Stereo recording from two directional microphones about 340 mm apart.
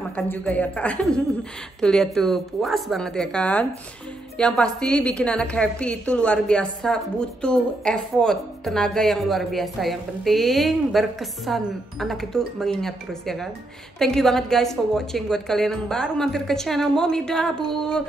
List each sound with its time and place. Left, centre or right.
0.1 s a woman's voice: centre